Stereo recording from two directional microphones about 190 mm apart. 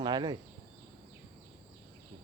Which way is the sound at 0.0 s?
20° right (ahead or behind).